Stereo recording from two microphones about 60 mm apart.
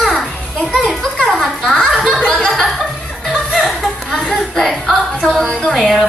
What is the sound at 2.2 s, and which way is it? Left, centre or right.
Chuckle, centre.